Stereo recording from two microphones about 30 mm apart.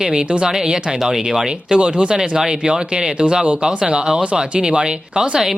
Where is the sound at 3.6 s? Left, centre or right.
Right.